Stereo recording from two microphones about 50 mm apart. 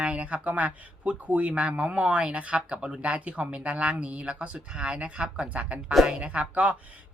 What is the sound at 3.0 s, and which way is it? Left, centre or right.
Speech, right.